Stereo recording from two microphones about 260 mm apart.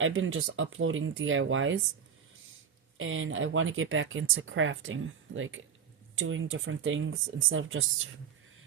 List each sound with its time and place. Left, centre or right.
0.0 s speech: right
3.0 s speech: right